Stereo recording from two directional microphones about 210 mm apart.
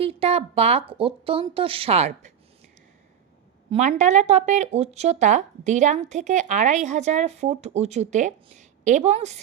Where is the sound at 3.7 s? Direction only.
35° right (ahead or behind).